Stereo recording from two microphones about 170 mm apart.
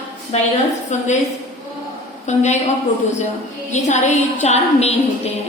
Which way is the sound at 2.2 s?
40° left (ahead or behind).